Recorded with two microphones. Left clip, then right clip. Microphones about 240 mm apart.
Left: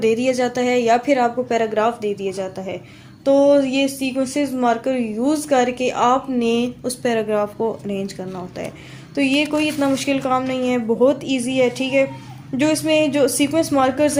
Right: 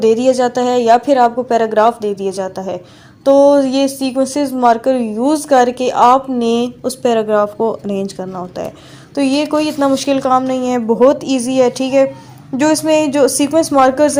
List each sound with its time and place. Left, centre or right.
0.0 s speech: right